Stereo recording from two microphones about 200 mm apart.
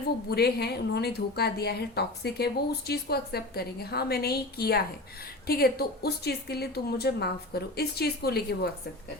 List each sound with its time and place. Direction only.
0.3 s a woman's voice: 55° left (ahead or behind)